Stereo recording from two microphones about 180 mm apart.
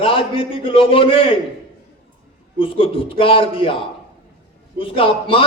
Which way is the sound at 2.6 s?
30° left (ahead or behind).